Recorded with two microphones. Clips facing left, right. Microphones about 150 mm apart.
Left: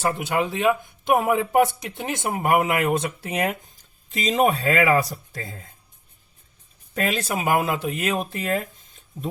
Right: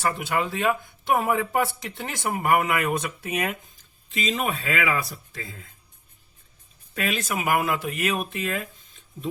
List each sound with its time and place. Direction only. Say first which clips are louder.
0.1 s speech: left 2 dB; 20° left (ahead or behind)
4.1 s speech: left 7 dB; 40° left (ahead or behind)
6.9 s speech: left 3 dB; 35° left (ahead or behind)